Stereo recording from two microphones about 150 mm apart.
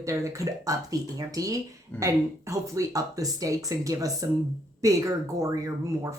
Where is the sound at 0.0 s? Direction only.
20° right (ahead or behind).